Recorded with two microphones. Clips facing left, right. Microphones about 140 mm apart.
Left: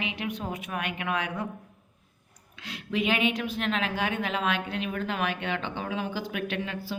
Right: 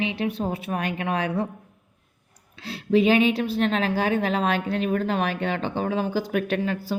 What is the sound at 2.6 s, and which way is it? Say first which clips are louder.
Speech: right 9 dB; 35° right (ahead or behind).